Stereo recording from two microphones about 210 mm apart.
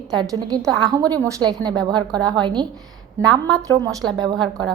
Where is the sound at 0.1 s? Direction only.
20° right (ahead or behind).